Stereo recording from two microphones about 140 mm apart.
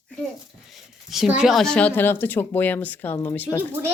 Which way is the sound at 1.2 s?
5° right (ahead or behind).